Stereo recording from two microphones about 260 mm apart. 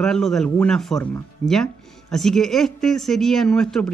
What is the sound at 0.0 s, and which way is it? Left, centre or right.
Speech, centre.